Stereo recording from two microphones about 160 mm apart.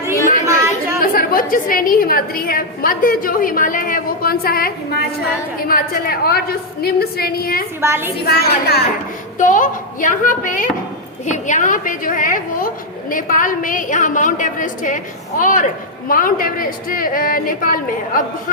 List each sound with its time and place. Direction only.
0.4 s chatter: 20° right (ahead or behind)
1.0 s a woman's voice: 65° left (ahead or behind)
7.8 s a woman's voice: 15° right (ahead or behind)
8.3 s a woman's voice: 80° left
9.4 s a woman's voice: 55° left (ahead or behind)